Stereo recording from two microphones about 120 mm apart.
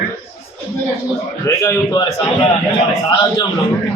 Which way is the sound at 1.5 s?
25° left (ahead or behind).